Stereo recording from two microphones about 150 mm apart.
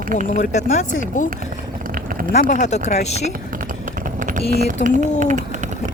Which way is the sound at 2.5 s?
50° left (ahead or behind).